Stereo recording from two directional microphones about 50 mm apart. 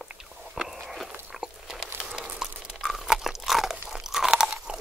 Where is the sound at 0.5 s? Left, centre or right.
Centre.